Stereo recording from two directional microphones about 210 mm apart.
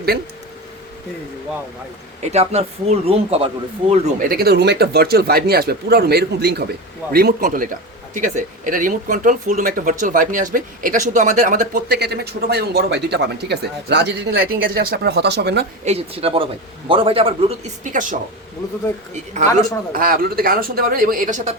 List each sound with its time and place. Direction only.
2.2 s speech: 30° right (ahead or behind); by 15.6 s 50° right (ahead or behind)
15.8 s speech: 30° right (ahead or behind)
17.9 s speech: 40° right (ahead or behind)
19.9 s speech: 45° right (ahead or behind)